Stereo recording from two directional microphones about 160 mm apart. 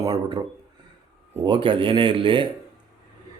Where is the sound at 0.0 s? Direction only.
25° right (ahead or behind).